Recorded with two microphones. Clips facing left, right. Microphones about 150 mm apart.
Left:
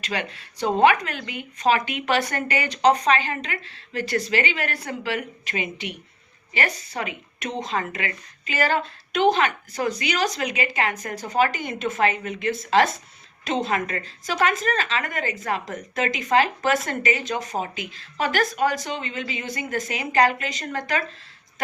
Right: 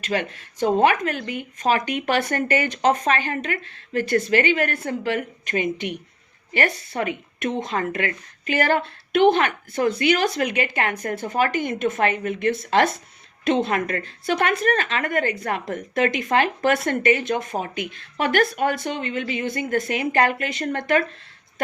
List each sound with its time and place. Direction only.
0.0 s speech: 45° right (ahead or behind)